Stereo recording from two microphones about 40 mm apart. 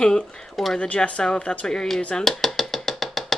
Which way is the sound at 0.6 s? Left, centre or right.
Centre.